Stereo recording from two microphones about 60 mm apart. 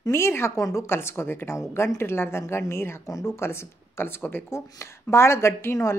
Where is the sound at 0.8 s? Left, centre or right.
Left.